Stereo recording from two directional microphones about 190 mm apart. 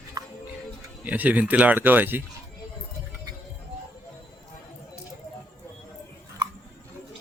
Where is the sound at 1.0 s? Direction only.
10° right (ahead or behind).